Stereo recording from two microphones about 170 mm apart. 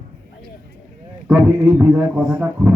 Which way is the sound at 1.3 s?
10° right (ahead or behind).